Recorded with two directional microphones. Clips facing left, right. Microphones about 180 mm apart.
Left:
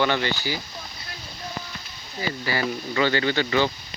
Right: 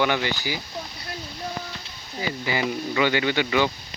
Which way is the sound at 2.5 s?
15° right (ahead or behind).